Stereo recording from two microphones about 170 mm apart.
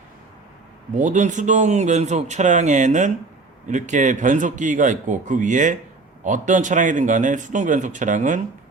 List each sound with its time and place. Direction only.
0.9 s speech: 45° right (ahead or behind)